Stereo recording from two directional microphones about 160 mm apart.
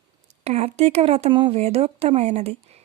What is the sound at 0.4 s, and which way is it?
Speech, 40° right (ahead or behind).